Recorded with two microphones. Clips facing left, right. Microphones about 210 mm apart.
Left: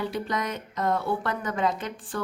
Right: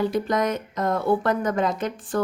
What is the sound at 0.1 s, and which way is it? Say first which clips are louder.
Speech: right 7 dB; 45° right (ahead or behind).